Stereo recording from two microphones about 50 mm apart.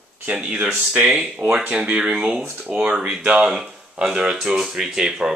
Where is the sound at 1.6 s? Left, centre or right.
Centre.